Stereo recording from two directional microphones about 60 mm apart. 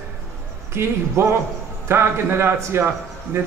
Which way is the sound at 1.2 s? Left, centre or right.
Right.